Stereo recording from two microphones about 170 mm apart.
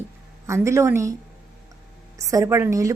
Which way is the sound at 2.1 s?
20° right (ahead or behind).